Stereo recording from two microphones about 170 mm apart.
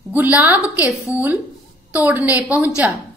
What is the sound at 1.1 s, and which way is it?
Speech, 15° left (ahead or behind).